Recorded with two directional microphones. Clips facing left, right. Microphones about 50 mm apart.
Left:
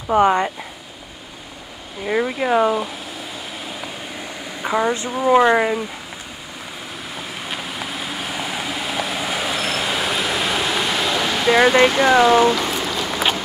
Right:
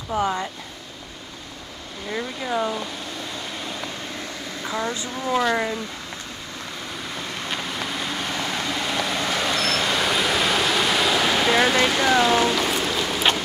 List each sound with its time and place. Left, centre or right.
0.1 s speech: left
2.0 s speech: left
2.7 s a sound: centre
5.1 s speech: centre
7.2 s vehicle: centre
11.5 s speech: centre
12.0 s a sound: centre